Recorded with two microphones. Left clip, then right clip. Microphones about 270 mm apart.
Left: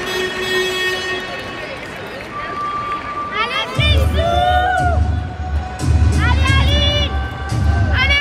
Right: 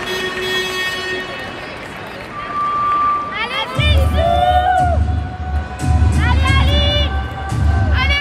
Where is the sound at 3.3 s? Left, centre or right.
Right.